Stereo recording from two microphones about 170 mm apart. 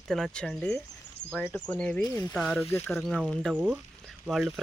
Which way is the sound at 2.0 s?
20° left (ahead or behind).